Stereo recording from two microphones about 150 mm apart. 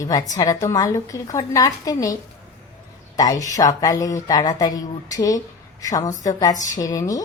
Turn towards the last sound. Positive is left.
turn(degrees=25)  # may be behind; listen again after turning